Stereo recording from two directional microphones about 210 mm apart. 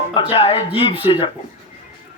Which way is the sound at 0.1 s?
25° left (ahead or behind).